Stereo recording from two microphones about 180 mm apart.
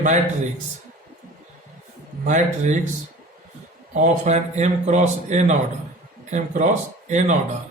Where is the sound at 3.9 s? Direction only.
40° right (ahead or behind).